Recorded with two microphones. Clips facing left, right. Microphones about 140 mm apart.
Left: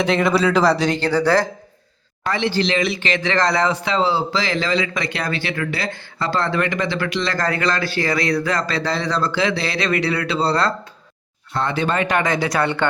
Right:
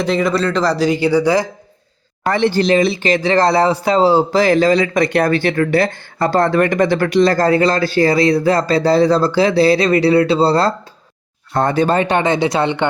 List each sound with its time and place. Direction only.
0.0 s a man's voice: centre (ahead or behind)
2.2 s speech: 50° right (ahead or behind); by 10.8 s 30° right (ahead or behind)
11.5 s speech: 45° right (ahead or behind); by 12.8 s 20° right (ahead or behind)